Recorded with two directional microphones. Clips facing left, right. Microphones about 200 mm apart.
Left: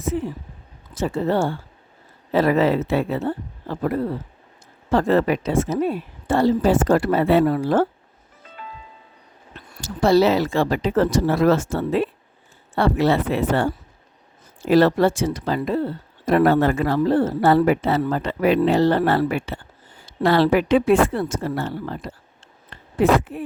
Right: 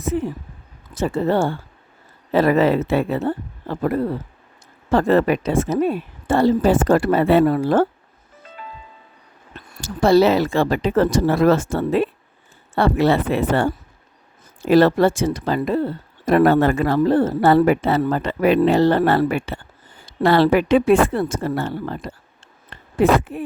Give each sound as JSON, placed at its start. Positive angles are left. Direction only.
{"t": 0.9, "sound": "a woman's voice", "side_deg": -55}
{"t": 9.8, "sound": "a woman's voice", "side_deg": -55}
{"t": 14.7, "sound": "a woman's voice", "side_deg": -55}
{"t": 23.3, "sound": "a woman's voice", "side_deg": -55}